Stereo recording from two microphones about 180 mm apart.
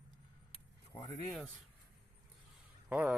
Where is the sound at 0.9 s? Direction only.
25° left (ahead or behind).